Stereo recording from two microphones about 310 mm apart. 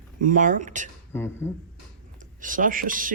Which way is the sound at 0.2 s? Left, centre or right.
Right.